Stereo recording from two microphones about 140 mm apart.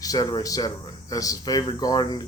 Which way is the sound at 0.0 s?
25° left (ahead or behind).